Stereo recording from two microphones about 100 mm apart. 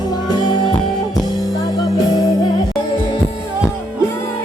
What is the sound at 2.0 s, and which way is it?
Music, 40° left (ahead or behind).